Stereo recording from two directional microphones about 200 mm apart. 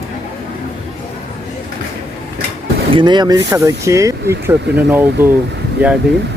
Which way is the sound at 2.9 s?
25° right (ahead or behind).